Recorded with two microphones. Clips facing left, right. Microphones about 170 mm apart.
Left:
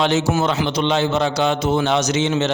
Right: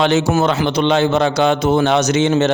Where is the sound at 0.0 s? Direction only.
60° right (ahead or behind).